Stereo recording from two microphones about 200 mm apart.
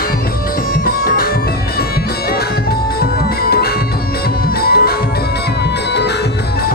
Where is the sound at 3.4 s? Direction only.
50° left (ahead or behind).